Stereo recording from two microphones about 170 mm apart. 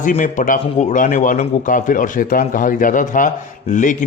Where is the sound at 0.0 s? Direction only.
50° left (ahead or behind).